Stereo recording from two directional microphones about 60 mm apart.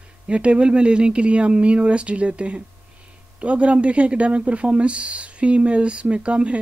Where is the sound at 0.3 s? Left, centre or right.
Centre.